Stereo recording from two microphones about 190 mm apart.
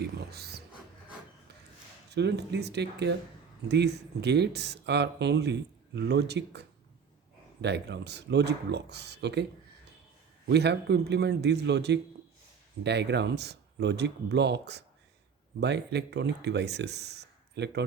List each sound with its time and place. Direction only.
0.0 s speech: 55° right (ahead or behind)
2.0 s speech: 60° right (ahead or behind)
10.5 s speech: 60° right (ahead or behind)